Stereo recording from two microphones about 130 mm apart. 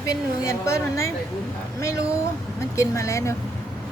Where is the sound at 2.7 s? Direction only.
25° left (ahead or behind).